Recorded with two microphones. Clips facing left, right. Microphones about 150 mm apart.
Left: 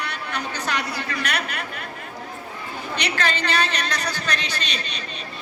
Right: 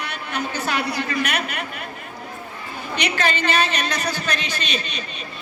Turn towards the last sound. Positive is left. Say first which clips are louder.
# right 3 dB
turn(degrees=-15)  # may be behind; listen again after turning